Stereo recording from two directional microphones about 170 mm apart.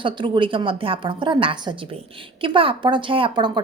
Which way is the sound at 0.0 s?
30° right (ahead or behind).